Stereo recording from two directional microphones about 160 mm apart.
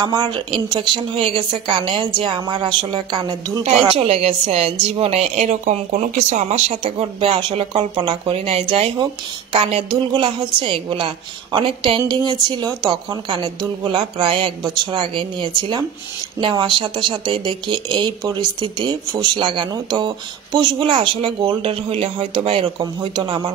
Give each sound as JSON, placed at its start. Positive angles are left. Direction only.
{"t": 0.0, "sound": "a woman's voice", "side_deg": -25}